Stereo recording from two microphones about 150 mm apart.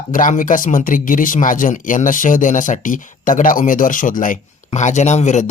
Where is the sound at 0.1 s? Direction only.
60° left (ahead or behind).